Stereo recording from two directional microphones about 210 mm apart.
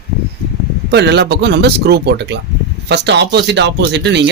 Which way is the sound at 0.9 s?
55° right (ahead or behind).